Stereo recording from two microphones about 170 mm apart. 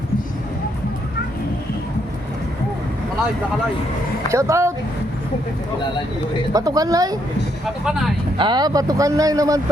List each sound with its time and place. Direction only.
4.3 s speech: 15° right (ahead or behind)
6.5 s speech: 20° right (ahead or behind)
8.4 s speech: 25° right (ahead or behind)